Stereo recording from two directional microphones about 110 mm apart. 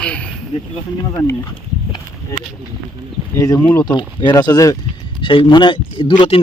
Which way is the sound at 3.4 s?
35° left (ahead or behind).